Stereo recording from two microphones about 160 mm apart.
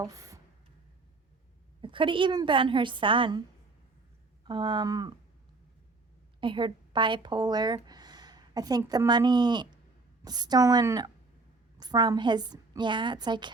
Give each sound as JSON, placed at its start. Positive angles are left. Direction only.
{"t": 0.0, "sound": "speech", "side_deg": -20}
{"t": 1.8, "sound": "a woman's voice", "side_deg": -30}
{"t": 4.4, "sound": "a woman's voice", "side_deg": -25}
{"t": 6.4, "sound": "a woman's voice", "side_deg": -30}